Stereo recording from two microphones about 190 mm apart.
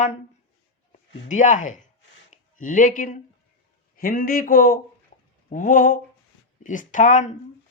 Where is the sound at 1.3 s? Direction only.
40° left (ahead or behind).